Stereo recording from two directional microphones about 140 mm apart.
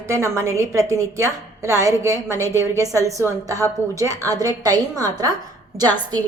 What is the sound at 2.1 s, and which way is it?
Speech, 20° left (ahead or behind).